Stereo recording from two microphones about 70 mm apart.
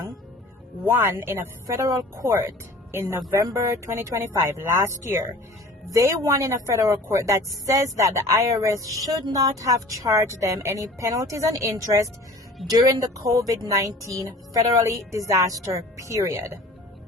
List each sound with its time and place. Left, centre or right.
0.9 s speech: right
12.6 s speech: right